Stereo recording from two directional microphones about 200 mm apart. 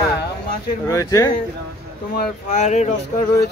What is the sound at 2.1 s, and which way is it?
Speech, 40° left (ahead or behind).